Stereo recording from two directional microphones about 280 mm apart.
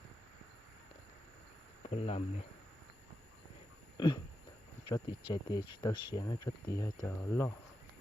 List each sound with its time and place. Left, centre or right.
1.9 s speech: left
3.9 s a sound: centre
4.9 s speech: centre